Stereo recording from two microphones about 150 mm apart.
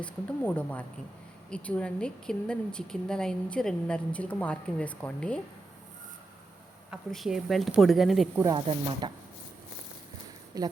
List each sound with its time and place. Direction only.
0.0 s a woman's voice: 10° left (ahead or behind)
7.1 s speech: centre (ahead or behind)
8.5 s speech: 35° right (ahead or behind)
10.5 s speech: 25° right (ahead or behind)